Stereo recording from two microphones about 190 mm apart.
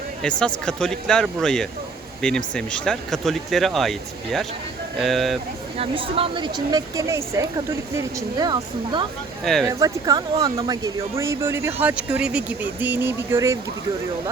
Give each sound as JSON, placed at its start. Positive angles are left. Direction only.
{"t": 0.2, "sound": "speech", "side_deg": 5}
{"t": 5.7, "sound": "speech", "side_deg": -30}
{"t": 9.4, "sound": "speech", "side_deg": 0}
{"t": 9.6, "sound": "speech", "side_deg": -20}